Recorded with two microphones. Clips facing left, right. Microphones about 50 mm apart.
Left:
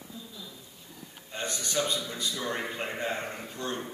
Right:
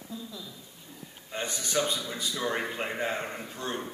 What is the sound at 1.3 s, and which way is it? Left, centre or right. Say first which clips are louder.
A man's voice: right 2 dB; centre.